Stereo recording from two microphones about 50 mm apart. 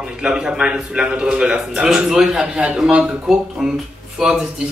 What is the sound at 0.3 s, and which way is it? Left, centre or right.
Speech, centre.